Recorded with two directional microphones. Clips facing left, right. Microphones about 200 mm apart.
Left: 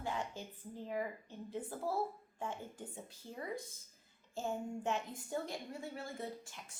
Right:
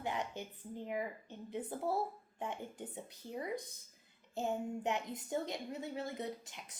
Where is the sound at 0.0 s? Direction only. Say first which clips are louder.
Right 1 dB; 20° right (ahead or behind).